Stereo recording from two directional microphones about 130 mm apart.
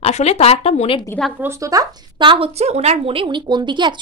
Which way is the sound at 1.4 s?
25° right (ahead or behind).